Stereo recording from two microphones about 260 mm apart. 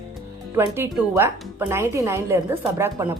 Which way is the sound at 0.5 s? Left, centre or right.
Centre.